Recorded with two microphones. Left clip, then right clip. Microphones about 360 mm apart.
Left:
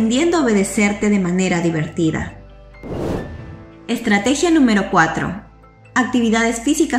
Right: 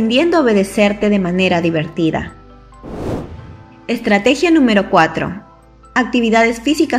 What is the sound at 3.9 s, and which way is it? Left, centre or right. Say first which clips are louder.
A woman's voice: right 4 dB; centre.